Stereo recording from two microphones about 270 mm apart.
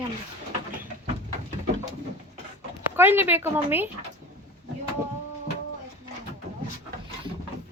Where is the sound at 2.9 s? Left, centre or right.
Centre.